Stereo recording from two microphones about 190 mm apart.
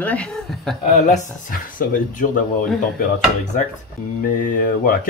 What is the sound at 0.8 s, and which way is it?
Speech, 40° left (ahead or behind).